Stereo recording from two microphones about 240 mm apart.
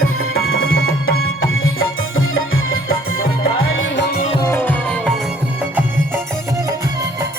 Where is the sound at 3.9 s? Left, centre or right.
Left.